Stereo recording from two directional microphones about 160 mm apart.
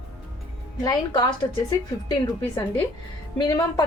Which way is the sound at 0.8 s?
25° left (ahead or behind).